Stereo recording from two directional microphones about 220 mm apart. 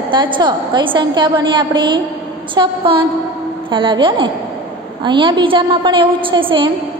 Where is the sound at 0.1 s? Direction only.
20° right (ahead or behind).